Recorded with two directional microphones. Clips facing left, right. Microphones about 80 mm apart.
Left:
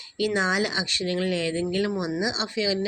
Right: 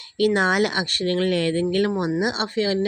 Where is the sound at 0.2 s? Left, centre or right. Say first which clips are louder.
Right 5 dB; right.